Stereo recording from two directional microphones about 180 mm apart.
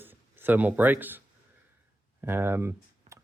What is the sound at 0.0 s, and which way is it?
Speech, 10° right (ahead or behind).